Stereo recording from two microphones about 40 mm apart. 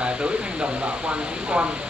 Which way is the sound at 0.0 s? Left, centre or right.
Right.